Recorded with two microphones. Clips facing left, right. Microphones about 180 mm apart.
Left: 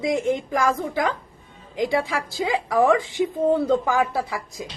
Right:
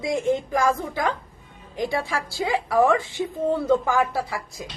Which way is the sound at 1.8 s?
15° left (ahead or behind).